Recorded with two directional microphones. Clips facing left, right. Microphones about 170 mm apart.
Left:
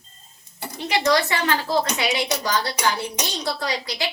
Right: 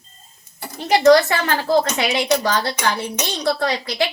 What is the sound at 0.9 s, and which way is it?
Speech, 45° right (ahead or behind).